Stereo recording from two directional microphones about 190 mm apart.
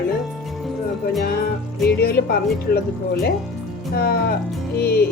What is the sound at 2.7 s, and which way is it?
Speech, 55° left (ahead or behind).